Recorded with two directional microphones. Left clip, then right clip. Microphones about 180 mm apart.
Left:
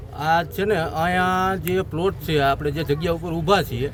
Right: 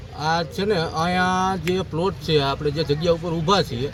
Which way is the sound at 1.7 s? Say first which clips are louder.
Left 1 dB; 30° left (ahead or behind).